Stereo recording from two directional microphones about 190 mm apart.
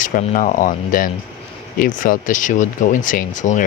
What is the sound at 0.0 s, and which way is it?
Speech, 45° left (ahead or behind).